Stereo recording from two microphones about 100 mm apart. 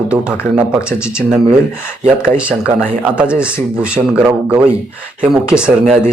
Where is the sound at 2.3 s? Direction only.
10° right (ahead or behind).